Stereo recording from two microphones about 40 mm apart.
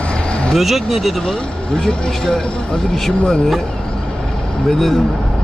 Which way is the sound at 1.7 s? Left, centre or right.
Centre.